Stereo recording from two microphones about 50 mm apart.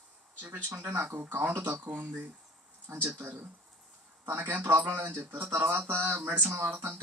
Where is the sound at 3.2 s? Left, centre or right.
Right.